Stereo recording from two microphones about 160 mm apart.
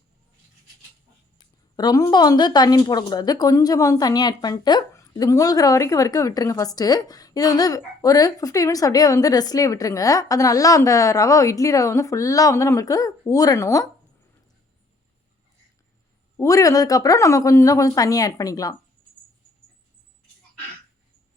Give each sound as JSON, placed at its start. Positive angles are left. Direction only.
{"t": 1.7, "sound": "speech", "side_deg": 25}
{"t": 16.4, "sound": "speech", "side_deg": 20}